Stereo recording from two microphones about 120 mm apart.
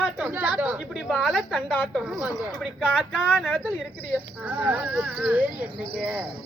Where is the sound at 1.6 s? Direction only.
15° left (ahead or behind).